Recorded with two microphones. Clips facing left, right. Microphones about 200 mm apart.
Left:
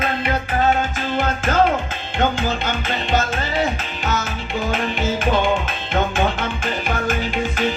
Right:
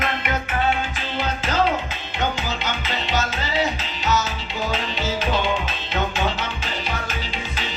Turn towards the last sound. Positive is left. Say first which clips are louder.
# left 9 dB
turn(degrees=50)  # may be behind; listen again after turning